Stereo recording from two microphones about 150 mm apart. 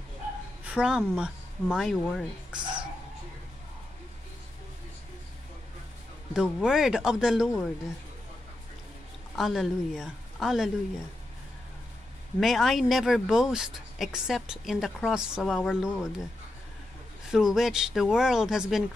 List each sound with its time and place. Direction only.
0.7 s speech: 5° right (ahead or behind)
2.6 s a sound: 30° right (ahead or behind)
6.3 s speech: 5° right (ahead or behind)
9.3 s a woman's voice: centre (ahead or behind)
12.4 s speech: centre (ahead or behind)
17.3 s speech: 5° right (ahead or behind)